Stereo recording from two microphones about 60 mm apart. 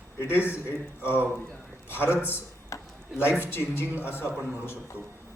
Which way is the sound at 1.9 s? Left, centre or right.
Left.